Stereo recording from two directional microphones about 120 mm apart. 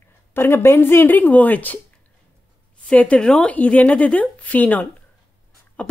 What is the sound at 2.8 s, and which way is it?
A woman's voice, 10° left (ahead or behind).